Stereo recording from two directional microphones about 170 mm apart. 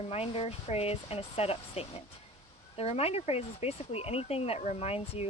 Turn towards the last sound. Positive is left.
turn(degrees=35)  # may be behind; listen again after turning